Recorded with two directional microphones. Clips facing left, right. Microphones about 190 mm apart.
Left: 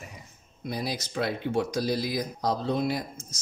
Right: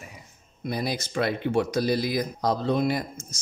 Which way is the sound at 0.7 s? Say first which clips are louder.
Right 3 dB; 60° right (ahead or behind).